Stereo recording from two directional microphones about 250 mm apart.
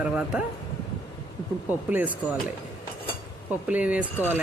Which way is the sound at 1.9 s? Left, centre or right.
Centre.